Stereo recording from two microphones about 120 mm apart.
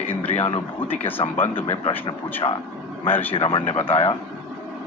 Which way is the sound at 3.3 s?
50° left (ahead or behind).